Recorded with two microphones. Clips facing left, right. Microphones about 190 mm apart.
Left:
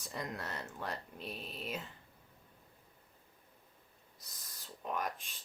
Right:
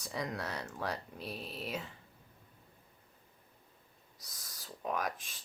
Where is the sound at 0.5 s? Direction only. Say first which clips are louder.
Right 3 dB; 70° right (ahead or behind).